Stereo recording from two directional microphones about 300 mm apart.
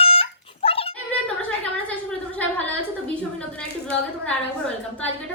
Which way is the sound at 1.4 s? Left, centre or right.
Centre.